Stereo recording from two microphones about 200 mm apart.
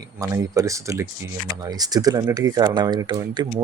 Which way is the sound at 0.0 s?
15° right (ahead or behind).